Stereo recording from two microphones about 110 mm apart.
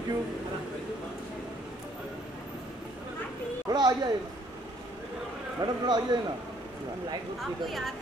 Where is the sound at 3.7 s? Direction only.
40° right (ahead or behind).